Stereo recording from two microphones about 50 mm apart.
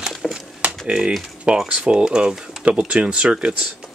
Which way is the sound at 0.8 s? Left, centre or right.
Centre.